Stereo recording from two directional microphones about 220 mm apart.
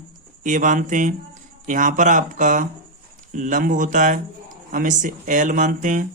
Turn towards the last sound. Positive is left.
turn(degrees=-35)  # may be behind; listen again after turning